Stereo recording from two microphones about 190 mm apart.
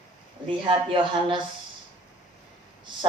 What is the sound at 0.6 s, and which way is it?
Speech, 25° right (ahead or behind).